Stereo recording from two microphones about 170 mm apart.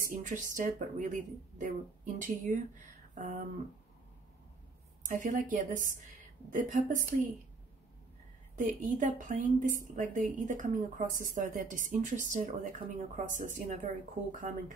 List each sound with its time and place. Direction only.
0.1 s a woman's voice: 50° right (ahead or behind)
5.0 s a woman's voice: 50° right (ahead or behind)
8.5 s a woman's voice: 50° right (ahead or behind)